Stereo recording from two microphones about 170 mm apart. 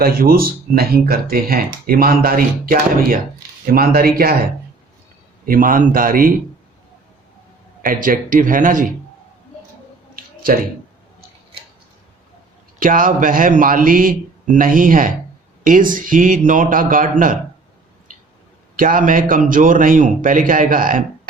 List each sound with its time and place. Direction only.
0.0 s speech: 60° right (ahead or behind)
5.5 s speech: 55° right (ahead or behind)
7.8 s a man's voice: 55° right (ahead or behind)
10.2 s a sound: 55° right (ahead or behind)
12.8 s a man's voice: 55° right (ahead or behind)
18.8 s a man's voice: 55° right (ahead or behind)